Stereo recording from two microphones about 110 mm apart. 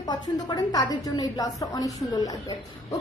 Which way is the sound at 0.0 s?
40° left (ahead or behind).